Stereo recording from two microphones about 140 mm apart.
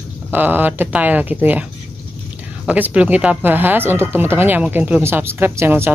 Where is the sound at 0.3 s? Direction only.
10° right (ahead or behind).